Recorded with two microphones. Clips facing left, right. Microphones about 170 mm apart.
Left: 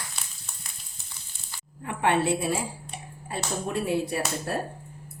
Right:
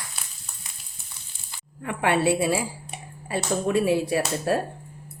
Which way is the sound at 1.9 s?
80° right.